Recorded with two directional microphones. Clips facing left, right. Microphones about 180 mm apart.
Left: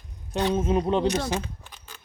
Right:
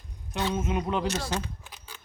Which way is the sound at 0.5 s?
30° left (ahead or behind).